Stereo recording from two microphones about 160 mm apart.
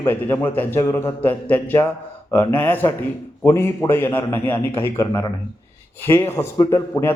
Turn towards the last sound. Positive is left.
turn(degrees=20)  # may be behind; listen again after turning